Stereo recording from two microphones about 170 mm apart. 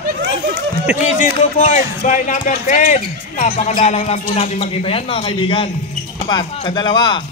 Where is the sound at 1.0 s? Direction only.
45° left (ahead or behind).